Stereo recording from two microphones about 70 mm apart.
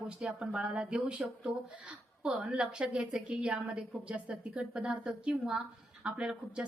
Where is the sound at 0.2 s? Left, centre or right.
Centre.